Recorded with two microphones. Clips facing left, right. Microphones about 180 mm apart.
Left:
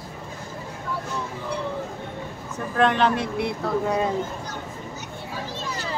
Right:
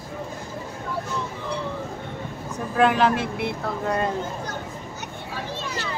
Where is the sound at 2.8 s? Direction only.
5° right (ahead or behind).